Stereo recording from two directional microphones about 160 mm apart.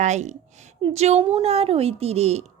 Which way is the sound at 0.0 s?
45° right (ahead or behind).